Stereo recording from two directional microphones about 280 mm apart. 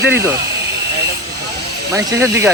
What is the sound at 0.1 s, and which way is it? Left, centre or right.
Speech, centre.